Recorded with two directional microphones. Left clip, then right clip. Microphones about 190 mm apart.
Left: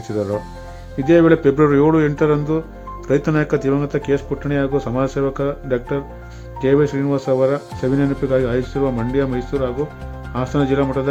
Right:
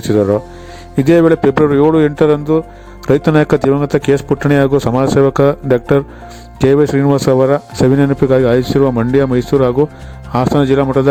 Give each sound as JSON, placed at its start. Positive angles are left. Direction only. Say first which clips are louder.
{"t": 0.1, "sound": "speech", "louder": "right 10 dB", "side_deg": -35}
{"t": 0.9, "sound": "speech", "louder": "right 3 dB", "side_deg": -50}